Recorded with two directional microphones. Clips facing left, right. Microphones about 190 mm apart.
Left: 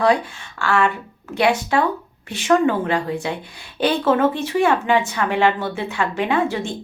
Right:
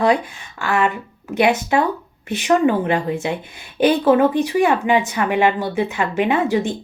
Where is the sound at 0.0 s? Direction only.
20° right (ahead or behind).